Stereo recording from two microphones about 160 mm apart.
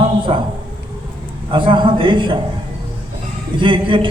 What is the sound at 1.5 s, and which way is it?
Speech, 30° right (ahead or behind).